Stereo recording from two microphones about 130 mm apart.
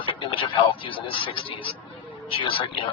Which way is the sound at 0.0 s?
40° left (ahead or behind).